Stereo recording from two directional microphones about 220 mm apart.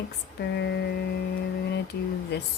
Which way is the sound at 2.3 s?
50° left (ahead or behind).